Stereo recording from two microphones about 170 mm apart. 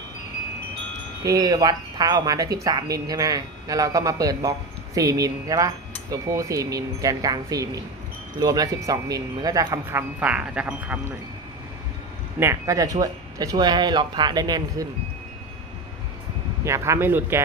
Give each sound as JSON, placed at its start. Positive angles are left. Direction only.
{"t": 1.2, "sound": "speech", "side_deg": -20}
{"t": 12.4, "sound": "speech", "side_deg": -15}
{"t": 16.6, "sound": "speech", "side_deg": -15}